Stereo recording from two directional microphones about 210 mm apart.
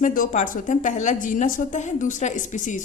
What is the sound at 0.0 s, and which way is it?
A woman's voice, 40° left (ahead or behind).